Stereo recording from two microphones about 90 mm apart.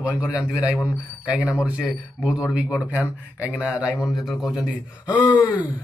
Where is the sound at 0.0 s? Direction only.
15° right (ahead or behind).